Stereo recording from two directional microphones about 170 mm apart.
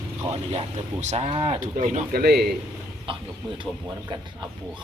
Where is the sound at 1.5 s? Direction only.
50° right (ahead or behind).